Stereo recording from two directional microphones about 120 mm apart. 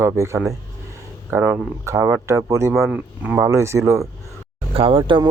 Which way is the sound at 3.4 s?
25° right (ahead or behind).